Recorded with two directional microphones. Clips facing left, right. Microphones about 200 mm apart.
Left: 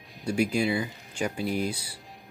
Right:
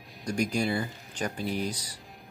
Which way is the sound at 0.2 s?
5° left (ahead or behind).